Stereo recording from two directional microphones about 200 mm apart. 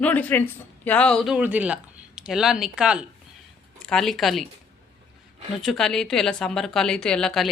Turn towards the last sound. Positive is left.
turn(degrees=5)  # may be behind; listen again after turning